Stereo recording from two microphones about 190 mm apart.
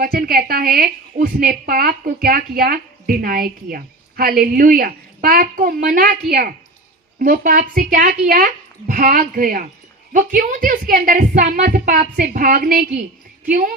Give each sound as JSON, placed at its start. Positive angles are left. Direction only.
{"t": 0.0, "sound": "a woman's voice", "side_deg": -50}